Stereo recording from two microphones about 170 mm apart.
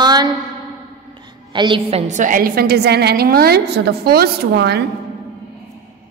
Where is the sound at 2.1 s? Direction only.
50° right (ahead or behind); by 4.9 s 75° right (ahead or behind).